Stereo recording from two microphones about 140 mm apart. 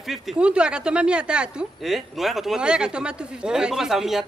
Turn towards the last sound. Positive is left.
turn(degrees=-5)  # may be behind; listen again after turning